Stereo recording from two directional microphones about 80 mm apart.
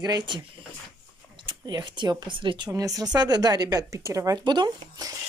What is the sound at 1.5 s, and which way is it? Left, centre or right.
Speech, right.